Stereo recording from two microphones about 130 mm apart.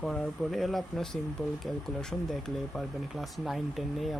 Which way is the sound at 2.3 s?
Centre (ahead or behind).